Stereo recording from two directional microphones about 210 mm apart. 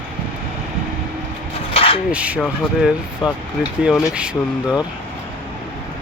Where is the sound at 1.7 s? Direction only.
25° left (ahead or behind).